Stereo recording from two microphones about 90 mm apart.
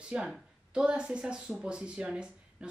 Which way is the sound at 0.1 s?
10° right (ahead or behind).